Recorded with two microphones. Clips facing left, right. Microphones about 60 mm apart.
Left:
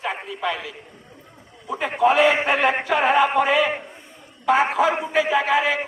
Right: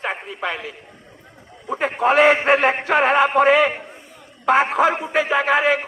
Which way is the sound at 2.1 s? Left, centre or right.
Right.